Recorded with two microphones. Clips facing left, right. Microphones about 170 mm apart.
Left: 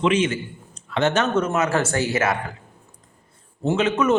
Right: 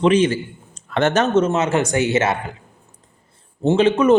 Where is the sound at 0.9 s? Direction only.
50° right (ahead or behind).